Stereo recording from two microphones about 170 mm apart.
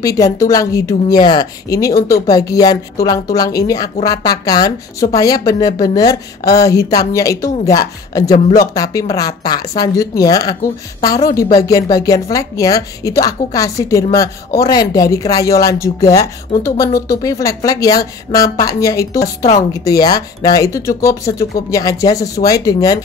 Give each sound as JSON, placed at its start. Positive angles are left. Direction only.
{"t": 0.0, "sound": "a woman's voice", "side_deg": 20}
{"t": 2.0, "sound": "speech", "side_deg": 60}
{"t": 2.2, "sound": "a woman's voice", "side_deg": 20}